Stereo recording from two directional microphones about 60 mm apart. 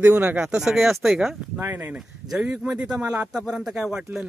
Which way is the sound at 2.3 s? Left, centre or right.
Centre.